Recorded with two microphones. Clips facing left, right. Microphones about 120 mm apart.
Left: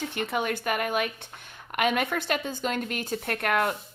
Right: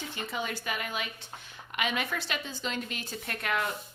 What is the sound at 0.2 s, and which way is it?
A woman's voice, 60° left (ahead or behind).